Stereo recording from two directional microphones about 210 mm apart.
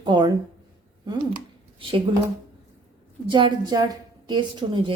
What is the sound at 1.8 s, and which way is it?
Speech, 25° right (ahead or behind).